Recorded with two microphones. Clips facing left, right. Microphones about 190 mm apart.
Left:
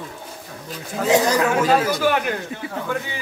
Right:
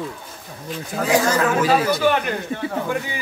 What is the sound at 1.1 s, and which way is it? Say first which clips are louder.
Speech: left 1 dB; 15° left (ahead or behind).